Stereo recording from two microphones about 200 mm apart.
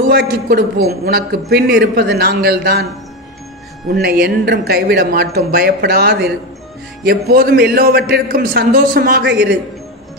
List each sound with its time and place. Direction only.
0.1 s a man's voice: 50° right (ahead or behind)
3.9 s a man's voice: 50° right (ahead or behind)